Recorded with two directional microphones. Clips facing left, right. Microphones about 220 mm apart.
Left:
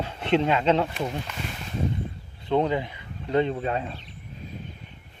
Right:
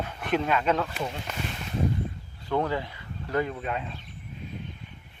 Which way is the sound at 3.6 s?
35° left (ahead or behind).